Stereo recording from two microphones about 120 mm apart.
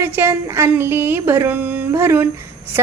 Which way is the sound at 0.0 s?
20° right (ahead or behind).